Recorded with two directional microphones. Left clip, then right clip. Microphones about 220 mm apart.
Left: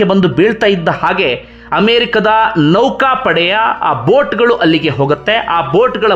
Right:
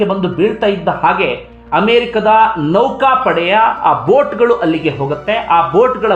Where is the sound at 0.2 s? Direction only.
30° left (ahead or behind).